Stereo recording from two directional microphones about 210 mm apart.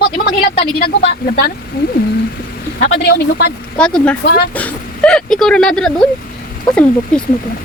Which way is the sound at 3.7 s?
5° left (ahead or behind).